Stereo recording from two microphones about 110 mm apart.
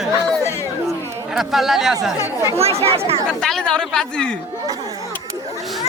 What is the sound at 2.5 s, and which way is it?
Speech, 65° right (ahead or behind).